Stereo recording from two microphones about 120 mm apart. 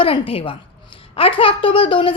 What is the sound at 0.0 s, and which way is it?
A woman's voice, 50° left (ahead or behind).